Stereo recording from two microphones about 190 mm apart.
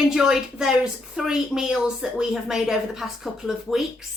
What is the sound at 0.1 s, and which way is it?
A woman's voice, 5° right (ahead or behind).